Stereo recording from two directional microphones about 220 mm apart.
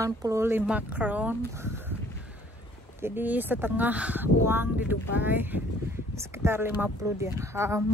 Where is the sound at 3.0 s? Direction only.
10° right (ahead or behind).